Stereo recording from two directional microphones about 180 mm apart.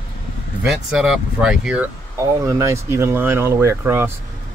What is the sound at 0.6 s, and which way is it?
Speech, 5° right (ahead or behind).